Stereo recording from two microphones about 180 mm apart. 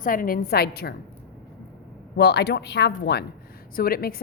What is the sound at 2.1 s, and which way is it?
Speech, 65° left (ahead or behind).